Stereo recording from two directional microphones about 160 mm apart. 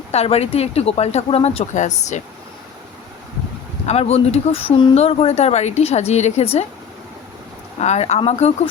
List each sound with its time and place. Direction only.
0.1 s speech: 40° left (ahead or behind)
3.8 s speech: 40° left (ahead or behind)
7.8 s speech: 45° left (ahead or behind)